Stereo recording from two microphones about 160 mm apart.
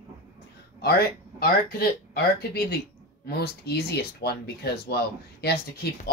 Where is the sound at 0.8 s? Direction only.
75° left (ahead or behind).